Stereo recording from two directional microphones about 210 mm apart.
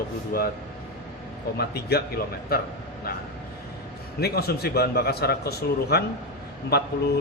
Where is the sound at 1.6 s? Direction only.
50° left (ahead or behind).